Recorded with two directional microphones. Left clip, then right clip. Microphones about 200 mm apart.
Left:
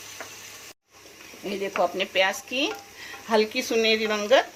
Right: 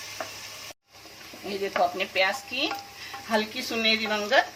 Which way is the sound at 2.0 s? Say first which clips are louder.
Left 2 dB; 45° left (ahead or behind).